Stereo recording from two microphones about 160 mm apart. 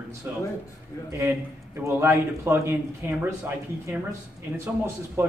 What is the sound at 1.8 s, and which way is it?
Speech, 20° right (ahead or behind).